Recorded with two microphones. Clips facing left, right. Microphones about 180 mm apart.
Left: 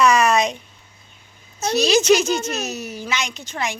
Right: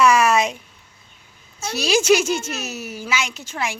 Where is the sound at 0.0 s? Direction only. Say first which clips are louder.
Even; 5° right (ahead or behind).